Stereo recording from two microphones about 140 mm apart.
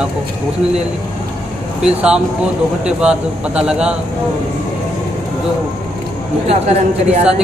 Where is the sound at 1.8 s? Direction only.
5° right (ahead or behind).